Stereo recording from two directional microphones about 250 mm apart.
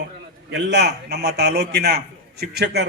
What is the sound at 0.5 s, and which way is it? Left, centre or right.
A man's voice, right.